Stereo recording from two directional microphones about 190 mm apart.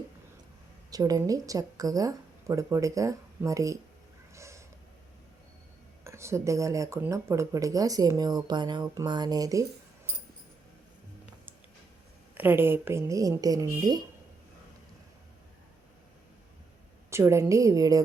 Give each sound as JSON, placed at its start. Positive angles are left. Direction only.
{"t": 0.9, "sound": "speech", "side_deg": -20}
{"t": 4.4, "sound": "a sound", "side_deg": -15}
{"t": 6.1, "sound": "speech", "side_deg": -15}
{"t": 12.3, "sound": "speech", "side_deg": -10}
{"t": 17.1, "sound": "speech", "side_deg": -15}